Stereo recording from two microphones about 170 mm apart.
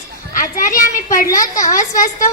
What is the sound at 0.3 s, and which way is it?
Speech, 50° left (ahead or behind).